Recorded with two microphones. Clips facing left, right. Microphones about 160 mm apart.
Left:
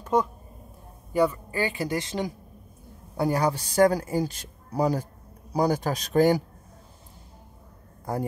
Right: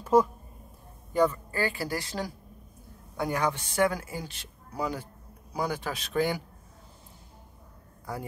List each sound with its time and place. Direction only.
0.0 s a sound: 5° right (ahead or behind)
1.1 s speech: 10° left (ahead or behind)
3.2 s speech: 35° left (ahead or behind)
8.0 s speech: 45° left (ahead or behind)